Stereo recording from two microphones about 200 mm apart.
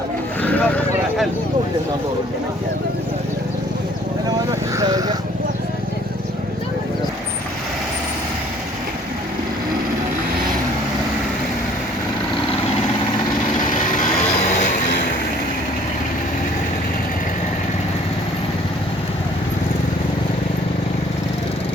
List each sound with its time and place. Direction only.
0.4 s vehicle: 10° left (ahead or behind)
4.8 s speech: 20° right (ahead or behind)